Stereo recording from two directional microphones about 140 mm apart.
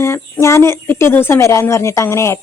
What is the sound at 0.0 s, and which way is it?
A woman's voice, 20° left (ahead or behind).